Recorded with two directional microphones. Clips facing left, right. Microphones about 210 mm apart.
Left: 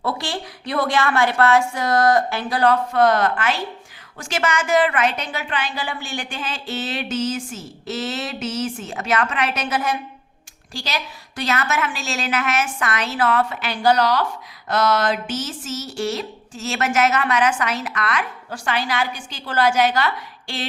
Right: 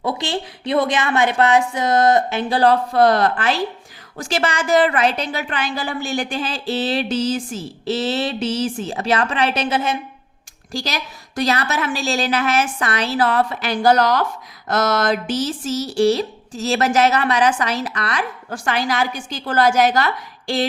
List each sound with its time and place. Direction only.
0.0 s a woman's voice: 20° right (ahead or behind)
10.7 s a woman's voice: 40° right (ahead or behind)